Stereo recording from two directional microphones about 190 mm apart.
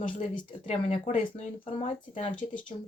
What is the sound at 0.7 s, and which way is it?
Speech, 35° left (ahead or behind).